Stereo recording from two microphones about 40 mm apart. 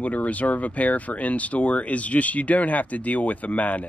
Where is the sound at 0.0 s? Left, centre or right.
Left.